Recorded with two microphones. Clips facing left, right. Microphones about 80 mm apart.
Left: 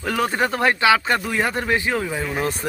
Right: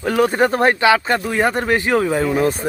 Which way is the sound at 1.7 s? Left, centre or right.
Right.